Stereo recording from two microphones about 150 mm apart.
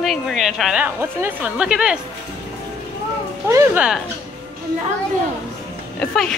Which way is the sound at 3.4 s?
20° right (ahead or behind).